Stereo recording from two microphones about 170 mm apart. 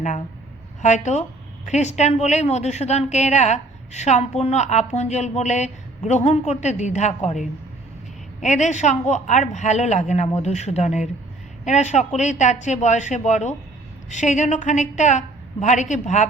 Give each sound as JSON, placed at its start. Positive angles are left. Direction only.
{"t": 0.8, "sound": "a woman's voice", "side_deg": 45}